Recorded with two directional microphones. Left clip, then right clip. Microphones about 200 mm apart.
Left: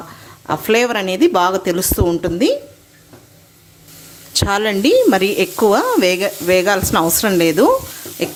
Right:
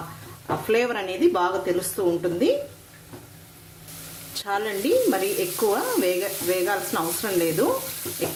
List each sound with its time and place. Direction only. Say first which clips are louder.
0.4 s speech: left 7 dB; 45° left (ahead or behind)
4.4 s speech: left 10 dB; 50° left (ahead or behind)